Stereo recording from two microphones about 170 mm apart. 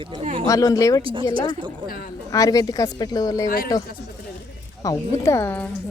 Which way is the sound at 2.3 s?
20° left (ahead or behind).